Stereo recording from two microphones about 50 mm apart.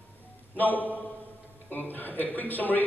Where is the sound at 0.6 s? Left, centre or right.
Left.